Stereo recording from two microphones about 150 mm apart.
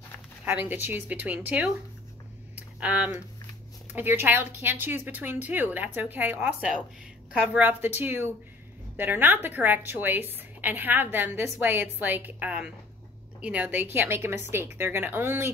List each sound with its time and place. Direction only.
0.5 s a woman's voice: 10° right (ahead or behind)
2.5 s a sound: 10° right (ahead or behind)
3.9 s a woman's voice: 15° right (ahead or behind)